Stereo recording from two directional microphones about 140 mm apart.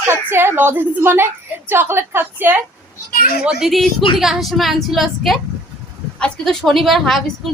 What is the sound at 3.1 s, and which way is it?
Speech, 90° left.